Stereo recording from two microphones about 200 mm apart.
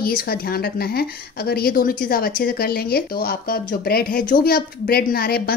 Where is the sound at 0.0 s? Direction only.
50° left (ahead or behind).